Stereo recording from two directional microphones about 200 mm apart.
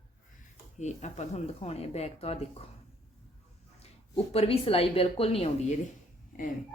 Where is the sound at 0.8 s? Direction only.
35° left (ahead or behind).